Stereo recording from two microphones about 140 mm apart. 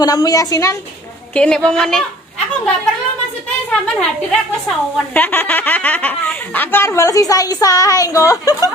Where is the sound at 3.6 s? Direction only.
5° left (ahead or behind); by 8.6 s 25° left (ahead or behind).